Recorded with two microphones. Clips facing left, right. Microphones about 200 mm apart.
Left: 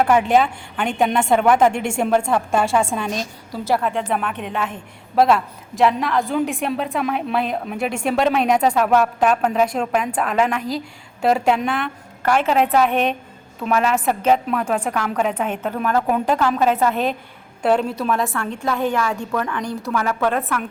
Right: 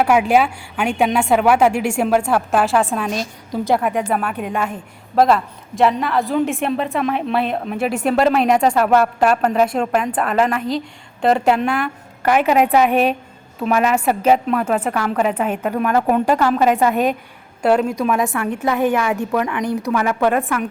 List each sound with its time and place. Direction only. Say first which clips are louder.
0.0 s a woman's voice: right 1 dB; 5° right (ahead or behind)
3.5 s a woman's voice: right 3 dB; 15° right (ahead or behind)
4.1 s a woman's voice: right 2 dB; 5° right (ahead or behind)
18.6 s a woman's voice: right 3 dB; 10° right (ahead or behind)